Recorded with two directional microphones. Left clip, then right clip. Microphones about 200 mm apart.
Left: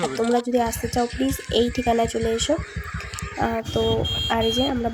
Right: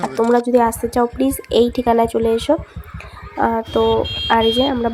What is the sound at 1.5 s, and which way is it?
Speech, 10° right (ahead or behind).